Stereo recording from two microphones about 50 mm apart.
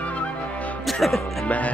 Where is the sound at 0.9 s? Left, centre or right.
Centre.